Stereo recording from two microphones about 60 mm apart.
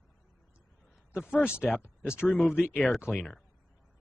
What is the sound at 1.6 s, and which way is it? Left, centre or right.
Speech, centre.